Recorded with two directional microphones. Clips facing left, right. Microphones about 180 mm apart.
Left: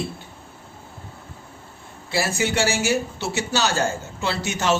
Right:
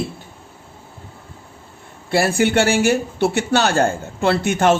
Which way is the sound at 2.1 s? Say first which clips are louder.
Right 7 dB; 55° right (ahead or behind).